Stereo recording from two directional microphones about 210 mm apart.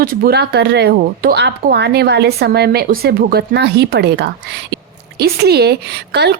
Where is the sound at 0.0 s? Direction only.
45° right (ahead or behind).